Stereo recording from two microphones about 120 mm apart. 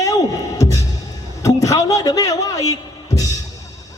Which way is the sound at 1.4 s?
30° left (ahead or behind).